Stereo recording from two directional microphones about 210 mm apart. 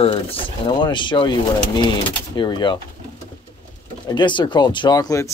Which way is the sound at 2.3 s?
20° left (ahead or behind).